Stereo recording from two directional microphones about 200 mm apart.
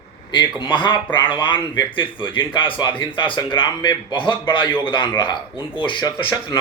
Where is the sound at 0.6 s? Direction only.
25° left (ahead or behind).